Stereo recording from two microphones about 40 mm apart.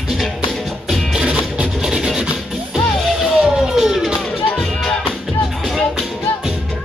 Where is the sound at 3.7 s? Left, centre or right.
Centre.